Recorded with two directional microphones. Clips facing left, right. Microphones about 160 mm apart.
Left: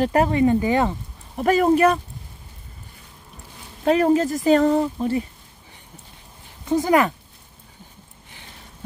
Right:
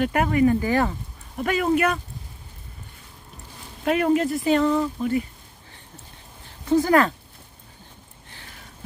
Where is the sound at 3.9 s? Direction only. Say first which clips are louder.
Left 3 dB; 35° left (ahead or behind).